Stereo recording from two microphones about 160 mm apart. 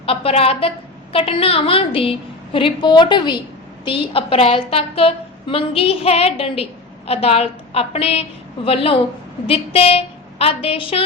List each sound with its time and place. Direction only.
0.0 s a woman's voice: 35° left (ahead or behind)